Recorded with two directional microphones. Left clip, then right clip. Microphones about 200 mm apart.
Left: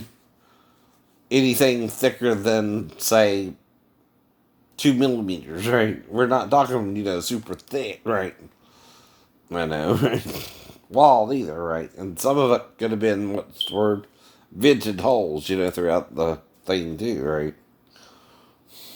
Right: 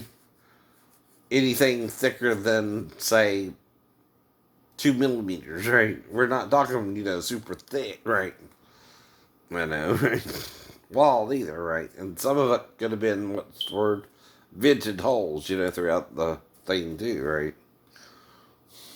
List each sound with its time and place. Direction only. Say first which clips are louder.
1.3 s speech: left 3 dB; 40° left (ahead or behind)
4.8 s speech: left 3 dB; 35° left (ahead or behind)
8.7 s sniff: left 3 dB; 40° left (ahead or behind)
9.5 s speech: left 3 dB; 35° left (ahead or behind)
17.9 s snort: left 1 dB; 35° left (ahead or behind)